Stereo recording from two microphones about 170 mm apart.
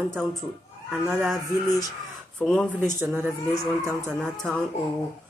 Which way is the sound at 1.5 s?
20° left (ahead or behind).